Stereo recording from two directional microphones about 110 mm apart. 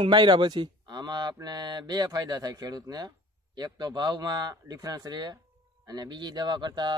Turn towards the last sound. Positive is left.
turn(degrees=-40)  # may be behind; listen again after turning